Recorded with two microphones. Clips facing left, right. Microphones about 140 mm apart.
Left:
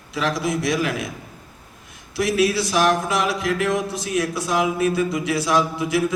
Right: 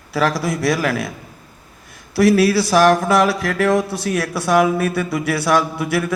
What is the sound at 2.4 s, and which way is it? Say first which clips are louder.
Speech: right 5 dB; 70° right (ahead or behind).